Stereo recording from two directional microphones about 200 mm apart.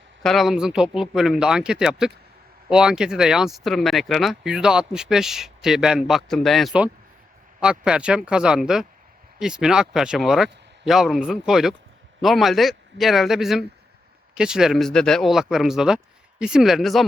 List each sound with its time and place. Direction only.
0.2 s speech: centre (ahead or behind)